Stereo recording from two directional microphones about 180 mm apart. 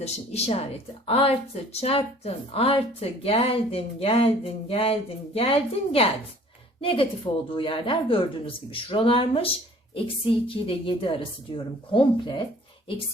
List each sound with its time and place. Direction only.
0.0 s speech: 35° left (ahead or behind)